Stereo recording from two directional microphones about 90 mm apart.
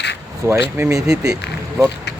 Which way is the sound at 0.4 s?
30° right (ahead or behind).